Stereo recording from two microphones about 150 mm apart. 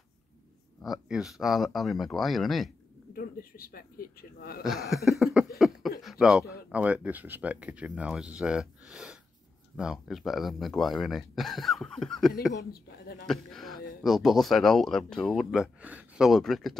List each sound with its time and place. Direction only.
1.0 s speech: 5° right (ahead or behind)
3.1 s speech: 80° left
4.6 s speech: centre (ahead or behind)
13.3 s speech: centre (ahead or behind)